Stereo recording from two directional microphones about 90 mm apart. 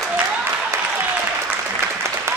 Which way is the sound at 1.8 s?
30° right (ahead or behind).